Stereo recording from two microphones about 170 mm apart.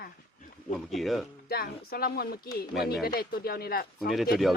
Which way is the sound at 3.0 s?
65° left (ahead or behind).